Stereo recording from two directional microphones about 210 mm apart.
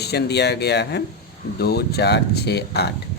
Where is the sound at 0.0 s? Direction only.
50° left (ahead or behind).